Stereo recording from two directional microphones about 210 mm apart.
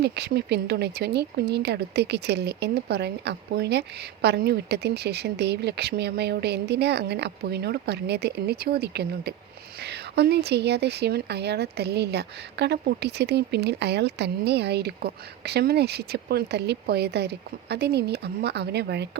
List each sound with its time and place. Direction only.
0.0 s speech: 50° right (ahead or behind)